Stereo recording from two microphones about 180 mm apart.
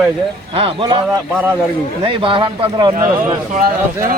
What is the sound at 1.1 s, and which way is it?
Speech, 10° right (ahead or behind).